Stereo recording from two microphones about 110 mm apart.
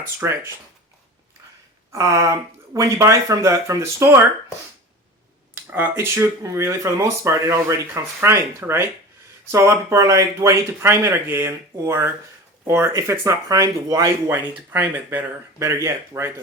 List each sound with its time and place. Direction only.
0.0 s speech: 25° right (ahead or behind)
1.9 s speech: 25° right (ahead or behind)
5.7 s speech: 20° right (ahead or behind)